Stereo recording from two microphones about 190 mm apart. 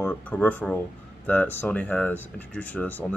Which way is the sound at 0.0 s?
5° left (ahead or behind).